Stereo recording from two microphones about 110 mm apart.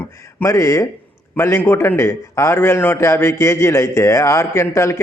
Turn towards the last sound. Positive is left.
turn(degrees=25)  # may be behind; listen again after turning